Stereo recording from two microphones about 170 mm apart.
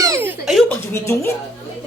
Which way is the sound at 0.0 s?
15° right (ahead or behind).